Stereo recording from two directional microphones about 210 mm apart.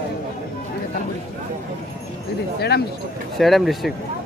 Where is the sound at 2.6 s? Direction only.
50° left (ahead or behind).